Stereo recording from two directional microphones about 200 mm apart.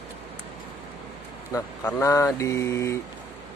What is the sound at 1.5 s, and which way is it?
Speech, 15° left (ahead or behind).